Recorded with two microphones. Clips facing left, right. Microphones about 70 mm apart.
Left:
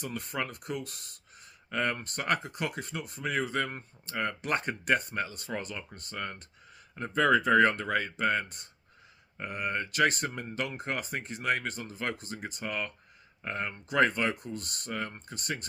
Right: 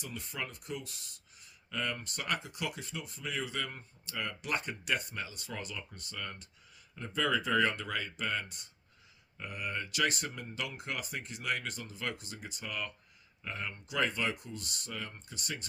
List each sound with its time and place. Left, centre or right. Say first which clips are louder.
0.0 s speech: left 6 dB; left